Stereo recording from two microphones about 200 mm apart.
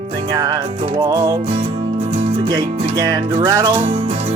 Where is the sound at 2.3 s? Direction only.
25° right (ahead or behind).